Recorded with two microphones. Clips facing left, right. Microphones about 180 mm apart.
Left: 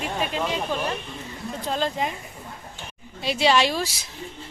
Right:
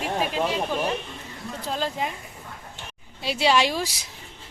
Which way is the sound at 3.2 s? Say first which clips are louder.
Left 1 dB; 5° right (ahead or behind).